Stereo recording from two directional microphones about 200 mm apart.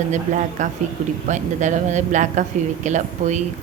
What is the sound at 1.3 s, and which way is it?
A woman's voice, 35° right (ahead or behind).